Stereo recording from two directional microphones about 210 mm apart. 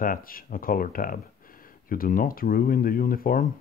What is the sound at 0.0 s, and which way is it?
Speech, 45° left (ahead or behind).